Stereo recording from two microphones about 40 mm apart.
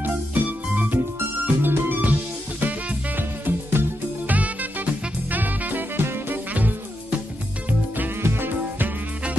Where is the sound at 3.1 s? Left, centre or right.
Right.